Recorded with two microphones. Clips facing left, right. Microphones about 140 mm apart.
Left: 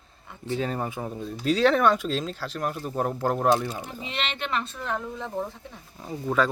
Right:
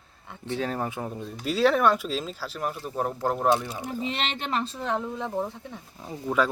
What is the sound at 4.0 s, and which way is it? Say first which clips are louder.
Speech: right 1 dB; 40° right (ahead or behind).